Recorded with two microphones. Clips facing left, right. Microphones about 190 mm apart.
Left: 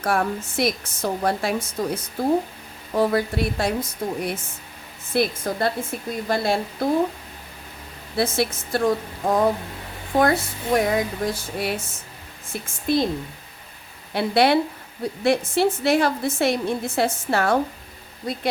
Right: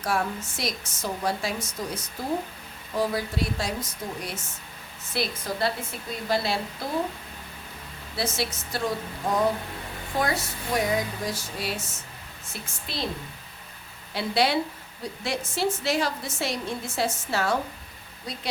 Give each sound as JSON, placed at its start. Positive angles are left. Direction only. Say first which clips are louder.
{"t": 0.0, "sound": "a woman's voice", "louder": "left 5 dB", "side_deg": 55}
{"t": 8.1, "sound": "a woman's voice", "louder": "left 7 dB", "side_deg": 55}
{"t": 14.1, "sound": "a woman's voice", "louder": "left 6 dB", "side_deg": 55}